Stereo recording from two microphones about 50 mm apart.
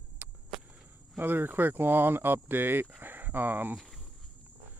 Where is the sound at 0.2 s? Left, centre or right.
Right.